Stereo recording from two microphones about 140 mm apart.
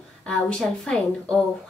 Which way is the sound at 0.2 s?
5° left (ahead or behind).